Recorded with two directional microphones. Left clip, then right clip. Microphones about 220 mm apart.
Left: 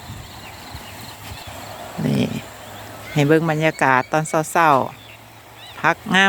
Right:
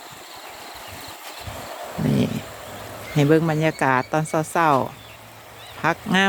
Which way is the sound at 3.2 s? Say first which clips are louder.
Left 2 dB; 5° left (ahead or behind).